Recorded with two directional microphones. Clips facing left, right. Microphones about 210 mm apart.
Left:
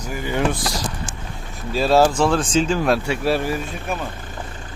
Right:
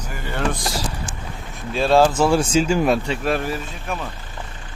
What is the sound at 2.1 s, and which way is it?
Speech, 5° right (ahead or behind).